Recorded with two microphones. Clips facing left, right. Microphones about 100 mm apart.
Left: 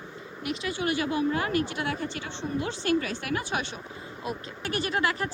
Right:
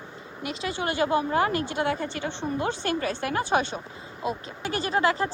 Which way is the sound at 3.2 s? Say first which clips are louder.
Right 6 dB; 35° right (ahead or behind).